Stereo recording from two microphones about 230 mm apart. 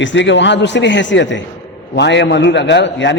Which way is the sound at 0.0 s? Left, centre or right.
Left.